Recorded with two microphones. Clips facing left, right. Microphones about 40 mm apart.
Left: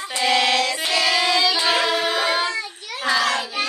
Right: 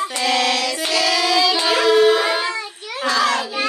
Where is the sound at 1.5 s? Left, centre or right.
Centre.